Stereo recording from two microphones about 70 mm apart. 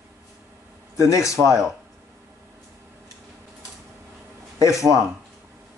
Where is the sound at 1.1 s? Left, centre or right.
Left.